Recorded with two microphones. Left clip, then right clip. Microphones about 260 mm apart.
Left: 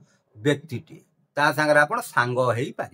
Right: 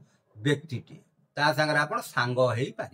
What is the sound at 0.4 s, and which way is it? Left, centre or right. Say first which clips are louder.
Speech: left 5 dB; centre.